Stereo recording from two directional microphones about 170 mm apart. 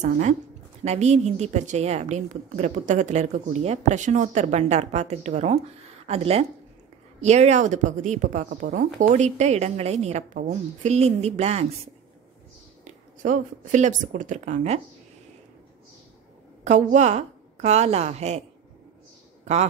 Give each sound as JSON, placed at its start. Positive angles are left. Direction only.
{"t": 0.0, "sound": "a woman's voice", "side_deg": -45}
{"t": 13.2, "sound": "a woman's voice", "side_deg": -45}
{"t": 16.6, "sound": "a woman's voice", "side_deg": -45}